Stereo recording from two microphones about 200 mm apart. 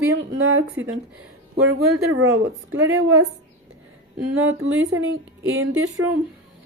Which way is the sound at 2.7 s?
80° right.